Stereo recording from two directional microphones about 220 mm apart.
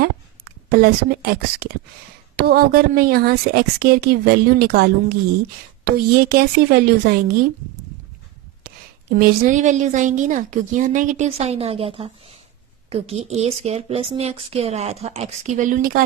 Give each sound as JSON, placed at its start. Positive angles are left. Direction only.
{"t": 0.4, "sound": "a woman's voice", "side_deg": -40}
{"t": 9.1, "sound": "a woman's voice", "side_deg": -35}